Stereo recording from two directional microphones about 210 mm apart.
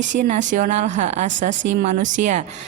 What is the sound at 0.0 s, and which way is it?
A woman's voice, 35° right (ahead or behind).